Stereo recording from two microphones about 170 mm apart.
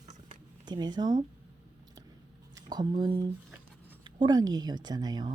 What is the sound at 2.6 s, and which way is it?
Speech, 25° right (ahead or behind).